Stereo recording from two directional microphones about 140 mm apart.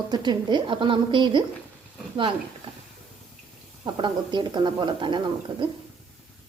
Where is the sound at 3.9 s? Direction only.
35° right (ahead or behind).